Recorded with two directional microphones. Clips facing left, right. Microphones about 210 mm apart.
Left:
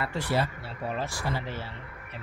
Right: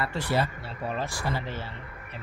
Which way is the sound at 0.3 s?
5° left (ahead or behind).